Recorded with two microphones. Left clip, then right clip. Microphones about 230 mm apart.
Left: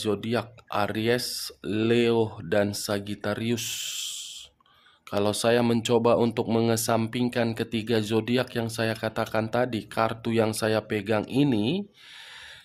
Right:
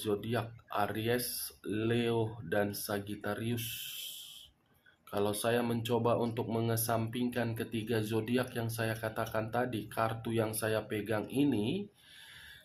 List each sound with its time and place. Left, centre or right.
0.0 s speech: left